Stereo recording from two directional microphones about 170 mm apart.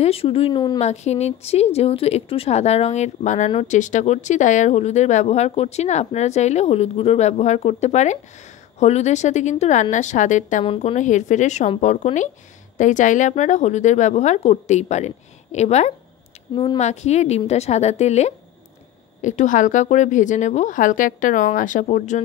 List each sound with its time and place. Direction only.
0.0 s speech: 35° left (ahead or behind)
0.7 s speech: 40° left (ahead or behind)